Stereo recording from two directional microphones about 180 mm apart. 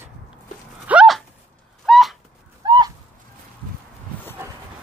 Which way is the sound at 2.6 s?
25° right (ahead or behind).